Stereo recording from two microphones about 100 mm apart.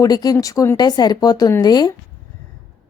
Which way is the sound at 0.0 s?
40° left (ahead or behind).